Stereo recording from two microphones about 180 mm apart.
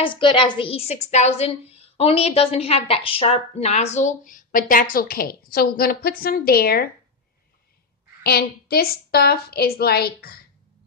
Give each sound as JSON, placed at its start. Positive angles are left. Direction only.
{"t": 0.0, "sound": "a woman's voice", "side_deg": 30}
{"t": 8.2, "sound": "a woman's voice", "side_deg": 60}